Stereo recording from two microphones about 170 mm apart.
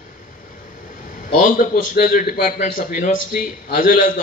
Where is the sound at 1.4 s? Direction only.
55° left (ahead or behind).